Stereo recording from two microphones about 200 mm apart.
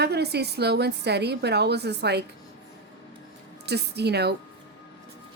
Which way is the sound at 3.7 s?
55° right (ahead or behind).